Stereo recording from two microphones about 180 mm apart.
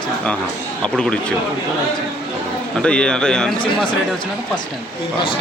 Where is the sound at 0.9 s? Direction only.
5° left (ahead or behind).